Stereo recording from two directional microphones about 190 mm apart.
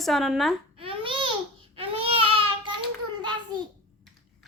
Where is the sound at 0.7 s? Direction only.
30° right (ahead or behind).